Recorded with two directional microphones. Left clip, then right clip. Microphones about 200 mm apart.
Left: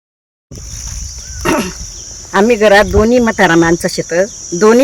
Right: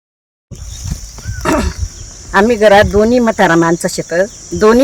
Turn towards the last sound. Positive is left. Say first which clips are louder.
# left 1 dB
turn(degrees=20)  # may be behind; listen again after turning